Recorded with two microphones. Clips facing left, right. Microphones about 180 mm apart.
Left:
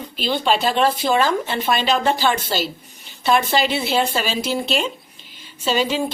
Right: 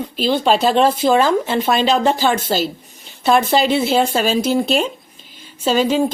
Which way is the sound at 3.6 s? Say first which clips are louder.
Right 5 dB; 45° right (ahead or behind).